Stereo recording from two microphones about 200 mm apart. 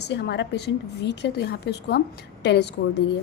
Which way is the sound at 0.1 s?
60° left (ahead or behind).